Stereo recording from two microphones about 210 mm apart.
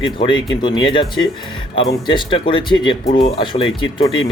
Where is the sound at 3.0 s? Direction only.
40° left (ahead or behind).